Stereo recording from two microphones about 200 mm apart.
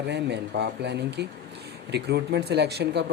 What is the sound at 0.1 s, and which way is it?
Speech, 60° right (ahead or behind).